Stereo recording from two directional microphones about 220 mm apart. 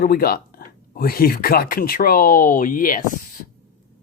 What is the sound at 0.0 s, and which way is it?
Speech, 45° left (ahead or behind).